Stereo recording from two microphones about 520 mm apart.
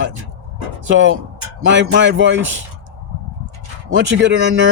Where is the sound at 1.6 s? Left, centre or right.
Right.